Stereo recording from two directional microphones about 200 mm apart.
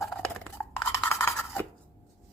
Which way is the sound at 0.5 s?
10° left (ahead or behind).